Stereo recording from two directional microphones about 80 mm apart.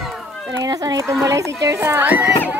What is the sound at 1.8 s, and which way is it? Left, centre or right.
Speech, right.